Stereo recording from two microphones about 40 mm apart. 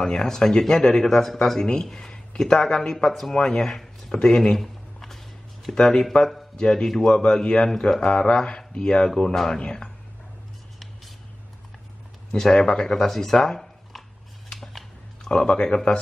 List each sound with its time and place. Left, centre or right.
0.0 s speech: centre
3.1 s speech: centre
3.3 s speech: centre
4.6 s a sound: centre
5.7 s speech: left
9.1 s speech: centre
12.4 s speech: centre
13.5 s a sound: centre
15.2 s speech: centre